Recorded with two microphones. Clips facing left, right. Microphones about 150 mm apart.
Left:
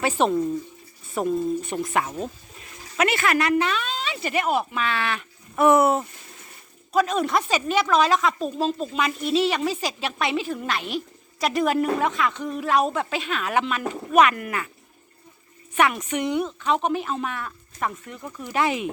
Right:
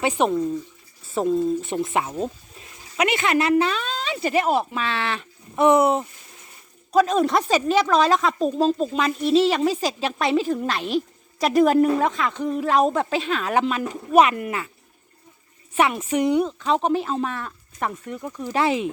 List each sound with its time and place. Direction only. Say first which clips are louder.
0.0 s speech: right 1 dB; 15° right (ahead or behind)
1.0 s speech: right 3 dB; 25° right (ahead or behind)
6.9 s speech: right 3 dB; 35° right (ahead or behind)
15.7 s speech: right 2 dB; 30° right (ahead or behind)